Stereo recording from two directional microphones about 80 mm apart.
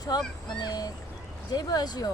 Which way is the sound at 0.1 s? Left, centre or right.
Left.